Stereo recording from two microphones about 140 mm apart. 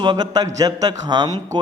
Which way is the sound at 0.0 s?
30° right (ahead or behind).